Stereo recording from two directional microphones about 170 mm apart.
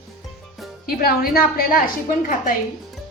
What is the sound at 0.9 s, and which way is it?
Speech, 60° left (ahead or behind).